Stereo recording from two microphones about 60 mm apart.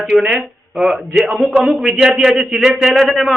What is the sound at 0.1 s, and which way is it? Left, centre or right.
A man's voice, centre.